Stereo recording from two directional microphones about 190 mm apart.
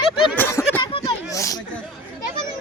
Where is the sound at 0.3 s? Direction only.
10° left (ahead or behind).